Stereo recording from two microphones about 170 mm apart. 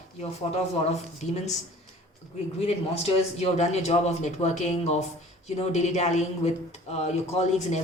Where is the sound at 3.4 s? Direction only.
40° left (ahead or behind).